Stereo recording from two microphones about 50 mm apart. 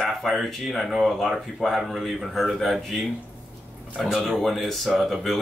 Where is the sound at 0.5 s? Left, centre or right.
Centre.